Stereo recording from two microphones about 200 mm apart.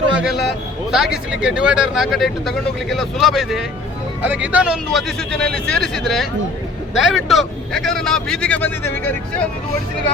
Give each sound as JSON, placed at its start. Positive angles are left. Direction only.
{"t": 0.2, "sound": "speech", "side_deg": 0}